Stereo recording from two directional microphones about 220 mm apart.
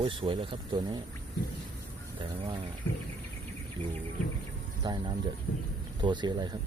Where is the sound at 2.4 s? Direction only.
25° right (ahead or behind).